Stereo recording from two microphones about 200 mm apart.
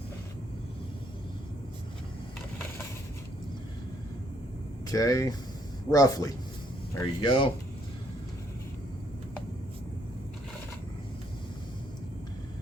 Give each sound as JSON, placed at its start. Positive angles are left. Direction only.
{"t": 4.9, "sound": "speech", "side_deg": 15}